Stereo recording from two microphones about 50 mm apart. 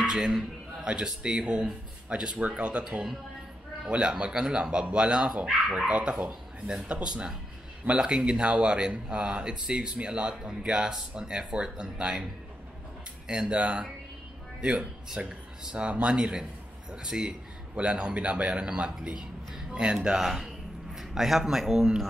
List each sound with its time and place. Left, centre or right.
0.0 s speech: centre
3.9 s speech: centre
13.3 s speech: centre
14.6 s speech: right
20.2 s a man's voice: centre